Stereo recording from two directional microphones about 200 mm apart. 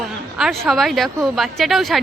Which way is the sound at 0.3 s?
Centre (ahead or behind).